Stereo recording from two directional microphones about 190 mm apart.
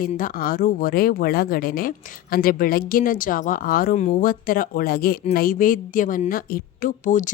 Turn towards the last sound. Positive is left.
turn(degrees=40)  # may be behind; listen again after turning